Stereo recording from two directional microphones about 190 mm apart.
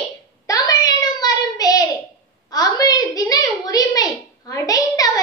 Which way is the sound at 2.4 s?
20° left (ahead or behind).